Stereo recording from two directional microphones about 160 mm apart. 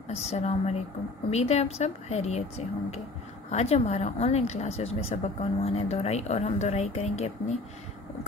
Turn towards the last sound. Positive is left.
turn(degrees=45)  # may be behind; listen again after turning